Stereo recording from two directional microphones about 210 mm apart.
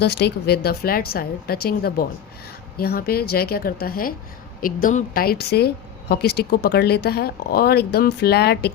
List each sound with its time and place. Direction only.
0.0 s speech: 55° left (ahead or behind)